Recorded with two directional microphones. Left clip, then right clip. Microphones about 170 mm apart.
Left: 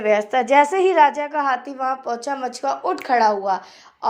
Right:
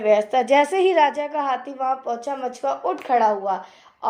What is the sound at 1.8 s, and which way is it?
A woman's voice, 25° left (ahead or behind).